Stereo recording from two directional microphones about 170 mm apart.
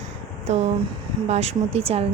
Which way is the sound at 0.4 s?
40° right (ahead or behind).